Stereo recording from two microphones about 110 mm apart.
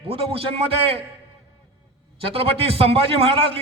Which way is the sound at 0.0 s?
60° right (ahead or behind).